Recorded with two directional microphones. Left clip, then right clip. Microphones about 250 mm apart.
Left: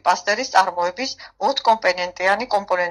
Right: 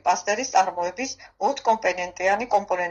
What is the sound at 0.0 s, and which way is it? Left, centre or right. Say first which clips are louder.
Speech: left 4 dB; left.